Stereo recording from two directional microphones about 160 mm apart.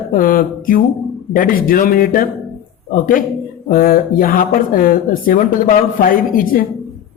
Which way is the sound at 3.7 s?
65° left (ahead or behind).